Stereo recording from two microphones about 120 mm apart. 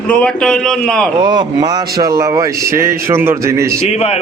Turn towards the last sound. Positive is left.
turn(degrees=55)  # may be behind; listen again after turning